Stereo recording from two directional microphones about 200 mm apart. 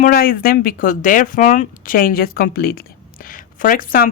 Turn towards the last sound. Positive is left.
turn(degrees=45)  # may be behind; listen again after turning